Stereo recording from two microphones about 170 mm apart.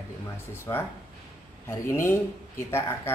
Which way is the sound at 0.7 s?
25° left (ahead or behind).